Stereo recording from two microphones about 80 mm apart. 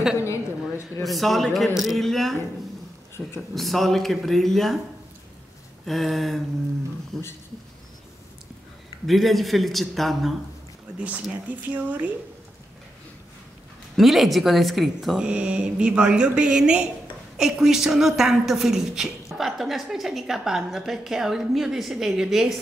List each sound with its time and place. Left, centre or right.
0.2 s a sound: left
1.0 s a woman's voice: centre
3.2 s mantra: centre
3.5 s a woman's voice: centre
5.9 s a woman's voice: centre
9.0 s a woman's voice: centre
11.0 s mantra: centre
11.4 s speech: right
13.9 s a woman's voice: centre
15.2 s mantra: centre
17.4 s a woman's voice: centre